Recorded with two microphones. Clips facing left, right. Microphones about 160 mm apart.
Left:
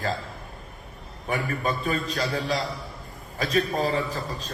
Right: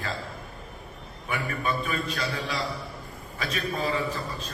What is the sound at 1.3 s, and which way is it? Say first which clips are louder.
A man's voice: left 3 dB; 40° left (ahead or behind).